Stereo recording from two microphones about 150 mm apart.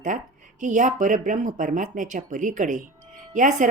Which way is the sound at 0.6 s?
55° right (ahead or behind).